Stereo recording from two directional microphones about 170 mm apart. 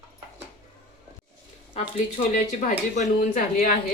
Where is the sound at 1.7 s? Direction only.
45° left (ahead or behind).